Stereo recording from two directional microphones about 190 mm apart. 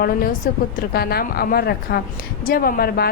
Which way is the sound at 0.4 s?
50° left (ahead or behind).